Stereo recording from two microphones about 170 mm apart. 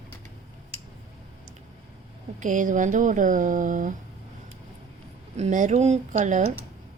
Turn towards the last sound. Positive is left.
turn(degrees=-45)  # may be behind; listen again after turning